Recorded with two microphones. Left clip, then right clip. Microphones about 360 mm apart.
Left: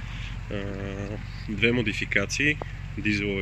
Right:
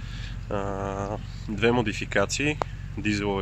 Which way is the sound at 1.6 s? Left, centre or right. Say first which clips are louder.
Right 1 dB; centre.